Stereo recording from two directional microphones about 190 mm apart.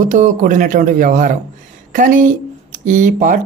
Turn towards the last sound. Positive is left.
turn(degrees=-40)  # may be behind; listen again after turning